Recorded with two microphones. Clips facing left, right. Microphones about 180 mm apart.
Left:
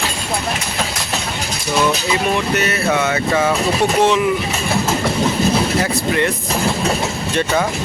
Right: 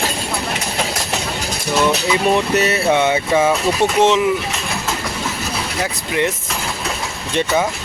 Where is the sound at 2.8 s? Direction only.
25° right (ahead or behind).